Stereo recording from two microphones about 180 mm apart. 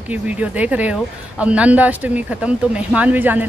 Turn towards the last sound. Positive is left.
turn(degrees=-10)  # may be behind; listen again after turning